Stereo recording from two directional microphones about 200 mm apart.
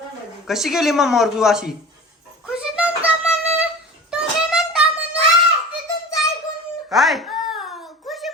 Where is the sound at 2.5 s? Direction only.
5° right (ahead or behind).